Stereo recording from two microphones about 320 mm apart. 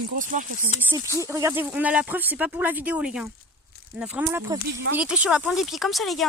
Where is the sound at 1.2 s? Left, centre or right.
Centre.